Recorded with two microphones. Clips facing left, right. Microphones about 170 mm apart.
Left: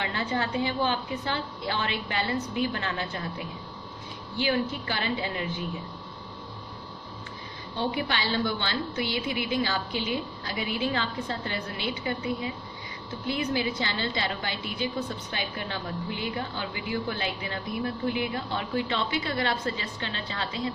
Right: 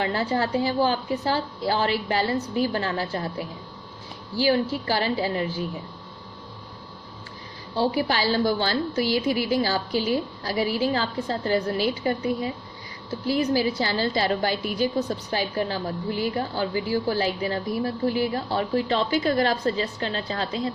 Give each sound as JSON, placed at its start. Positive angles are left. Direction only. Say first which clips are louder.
{"t": 0.0, "sound": "a woman's voice", "louder": "right 5 dB", "side_deg": -40}
{"t": 7.8, "sound": "a woman's voice", "louder": "right 6 dB", "side_deg": -40}